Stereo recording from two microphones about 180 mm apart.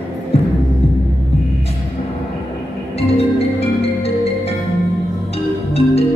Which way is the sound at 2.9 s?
35° left (ahead or behind).